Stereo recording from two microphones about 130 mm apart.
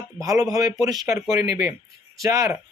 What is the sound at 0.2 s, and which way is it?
A man's voice, 25° right (ahead or behind).